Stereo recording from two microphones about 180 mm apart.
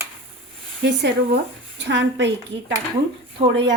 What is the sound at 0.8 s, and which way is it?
A woman's voice, 70° right (ahead or behind).